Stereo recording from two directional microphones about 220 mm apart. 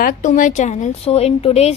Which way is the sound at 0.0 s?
35° left (ahead or behind).